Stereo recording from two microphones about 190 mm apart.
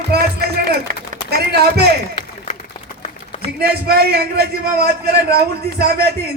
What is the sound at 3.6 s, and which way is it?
A man's voice, 55° right (ahead or behind).